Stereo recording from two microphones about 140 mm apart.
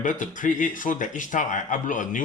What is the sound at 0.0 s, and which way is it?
Speech, 65° left (ahead or behind).